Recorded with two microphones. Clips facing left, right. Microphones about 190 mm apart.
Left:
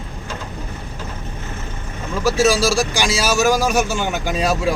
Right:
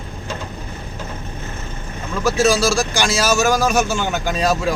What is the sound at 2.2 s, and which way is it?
Speech, 10° left (ahead or behind).